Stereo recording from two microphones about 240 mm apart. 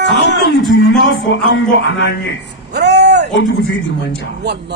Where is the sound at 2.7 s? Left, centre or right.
Right.